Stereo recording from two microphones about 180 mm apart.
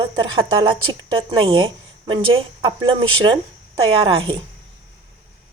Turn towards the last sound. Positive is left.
turn(degrees=-30)  # may be behind; listen again after turning